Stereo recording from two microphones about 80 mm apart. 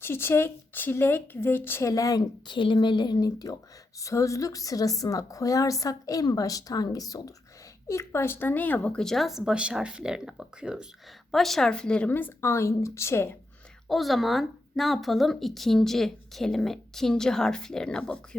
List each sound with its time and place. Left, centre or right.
0.0 s a woman's voice: left
1.9 s a woman's voice: left
2.5 s speech: left
4.0 s a woman's voice: left
7.9 s a woman's voice: left; by 9.0 s centre
9.0 s speech: centre
11.3 s a woman's voice: centre; by 13.3 s left
13.8 s speech: centre